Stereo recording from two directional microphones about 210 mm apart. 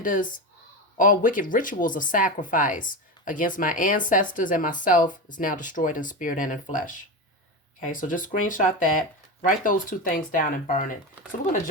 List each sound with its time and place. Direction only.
0.0 s speech: 40° left (ahead or behind)